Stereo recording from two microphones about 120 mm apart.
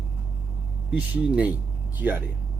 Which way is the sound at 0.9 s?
10° right (ahead or behind).